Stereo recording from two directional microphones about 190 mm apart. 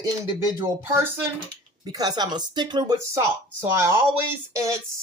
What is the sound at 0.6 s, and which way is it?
Speech, 10° right (ahead or behind).